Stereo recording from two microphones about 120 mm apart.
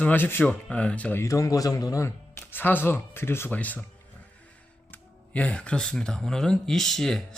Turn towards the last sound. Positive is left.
turn(degrees=5)  # may be behind; listen again after turning